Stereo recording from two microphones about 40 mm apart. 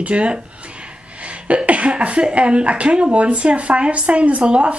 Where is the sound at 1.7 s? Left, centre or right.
Right.